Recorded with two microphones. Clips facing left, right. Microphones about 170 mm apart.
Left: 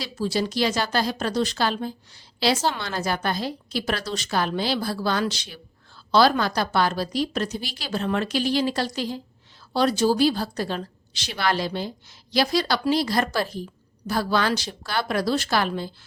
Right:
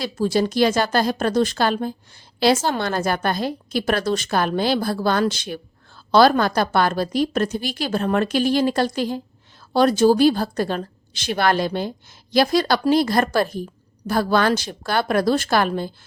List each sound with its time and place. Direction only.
0.0 s a woman's voice: 50° right (ahead or behind)